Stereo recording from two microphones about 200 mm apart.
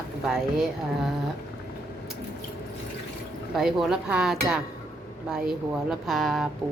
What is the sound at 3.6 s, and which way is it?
Speech, centre (ahead or behind).